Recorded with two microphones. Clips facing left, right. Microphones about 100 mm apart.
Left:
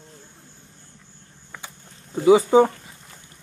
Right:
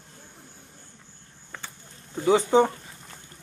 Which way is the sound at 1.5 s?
10° left (ahead or behind).